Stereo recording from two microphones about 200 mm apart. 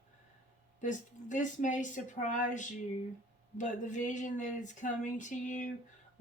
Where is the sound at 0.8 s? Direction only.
40° left (ahead or behind).